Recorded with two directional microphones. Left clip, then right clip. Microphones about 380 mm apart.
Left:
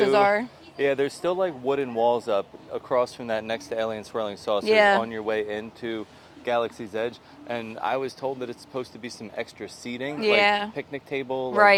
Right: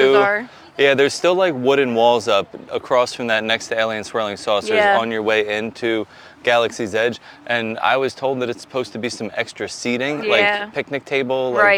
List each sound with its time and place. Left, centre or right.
0.1 s speech: centre
0.8 s speech: right
4.6 s speech: centre
4.9 s speech: right
10.2 s speech: centre
10.8 s speech: right